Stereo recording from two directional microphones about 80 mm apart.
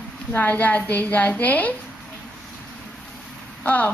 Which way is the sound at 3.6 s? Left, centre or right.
Left.